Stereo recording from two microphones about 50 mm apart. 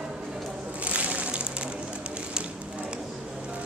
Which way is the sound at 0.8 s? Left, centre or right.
Right.